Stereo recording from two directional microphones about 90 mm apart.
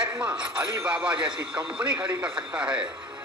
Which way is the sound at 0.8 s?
10° right (ahead or behind).